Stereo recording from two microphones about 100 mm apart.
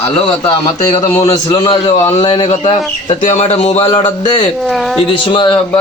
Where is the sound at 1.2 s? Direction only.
40° left (ahead or behind).